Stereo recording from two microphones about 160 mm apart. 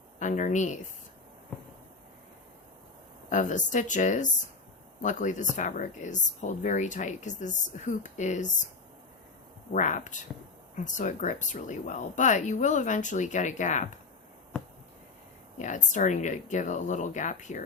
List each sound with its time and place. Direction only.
0.2 s speech: 50° left (ahead or behind)
3.2 s speech: 50° left (ahead or behind)
9.7 s speech: 50° left (ahead or behind)
15.5 s speech: 50° left (ahead or behind)